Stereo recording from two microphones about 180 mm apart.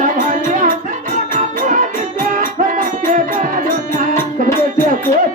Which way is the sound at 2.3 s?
45° right (ahead or behind).